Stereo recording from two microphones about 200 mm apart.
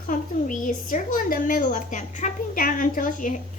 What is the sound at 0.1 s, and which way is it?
A woman's voice, 40° left (ahead or behind).